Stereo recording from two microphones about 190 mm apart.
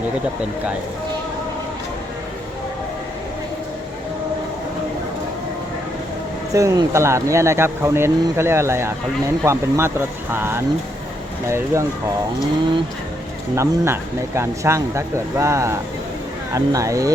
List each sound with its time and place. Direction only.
6.5 s speech: 15° right (ahead or behind)
13.6 s speech: 15° right (ahead or behind)